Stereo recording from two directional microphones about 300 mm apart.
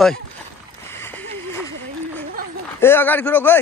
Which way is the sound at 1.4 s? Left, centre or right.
Centre.